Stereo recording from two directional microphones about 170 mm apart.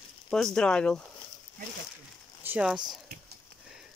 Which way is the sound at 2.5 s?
5° right (ahead or behind).